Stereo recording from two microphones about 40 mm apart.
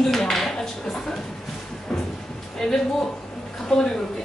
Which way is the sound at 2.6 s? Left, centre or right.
Centre.